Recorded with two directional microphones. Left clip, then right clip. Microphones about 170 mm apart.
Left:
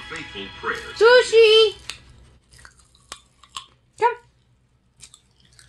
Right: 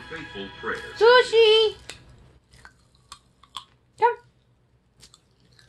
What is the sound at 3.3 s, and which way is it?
Chewing, 20° left (ahead or behind).